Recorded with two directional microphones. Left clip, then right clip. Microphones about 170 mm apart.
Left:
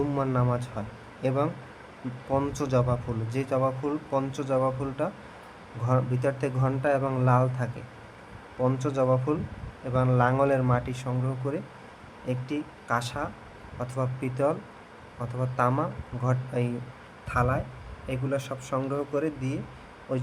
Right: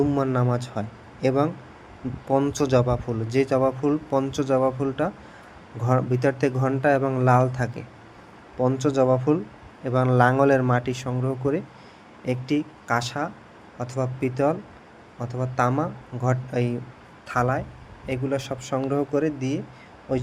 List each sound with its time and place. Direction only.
0.3 s speech: 25° right (ahead or behind)